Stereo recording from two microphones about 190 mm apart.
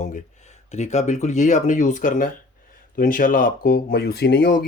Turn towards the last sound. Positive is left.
turn(degrees=50)  # may be behind; listen again after turning